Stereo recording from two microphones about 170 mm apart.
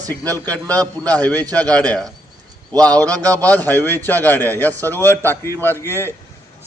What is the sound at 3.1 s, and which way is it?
Speech, 20° right (ahead or behind).